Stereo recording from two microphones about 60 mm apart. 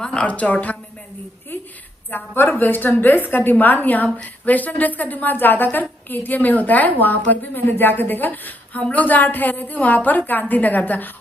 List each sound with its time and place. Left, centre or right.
0.0 s a woman's voice: centre
2.0 s a woman's voice: left